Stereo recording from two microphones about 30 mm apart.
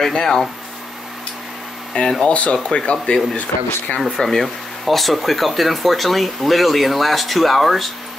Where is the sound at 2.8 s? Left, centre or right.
Left.